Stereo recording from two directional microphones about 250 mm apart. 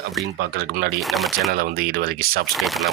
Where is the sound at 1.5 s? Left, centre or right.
Right.